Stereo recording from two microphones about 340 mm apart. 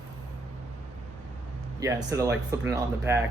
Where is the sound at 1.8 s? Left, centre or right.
Centre.